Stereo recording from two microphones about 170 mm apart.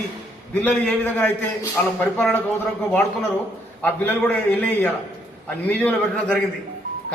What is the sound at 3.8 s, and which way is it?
A man's voice, 10° left (ahead or behind).